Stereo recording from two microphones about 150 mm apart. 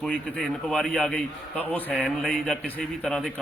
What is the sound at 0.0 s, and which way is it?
A man's voice, 5° left (ahead or behind).